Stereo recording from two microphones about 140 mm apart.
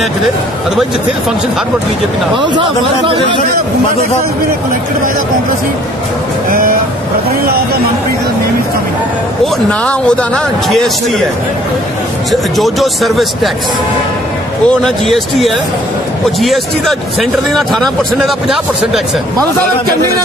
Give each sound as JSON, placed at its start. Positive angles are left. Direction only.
{"t": 3.1, "sound": "a man's voice", "side_deg": -40}
{"t": 9.7, "sound": "speech", "side_deg": 5}
{"t": 12.3, "sound": "speech", "side_deg": 0}
{"t": 14.7, "sound": "speech", "side_deg": 5}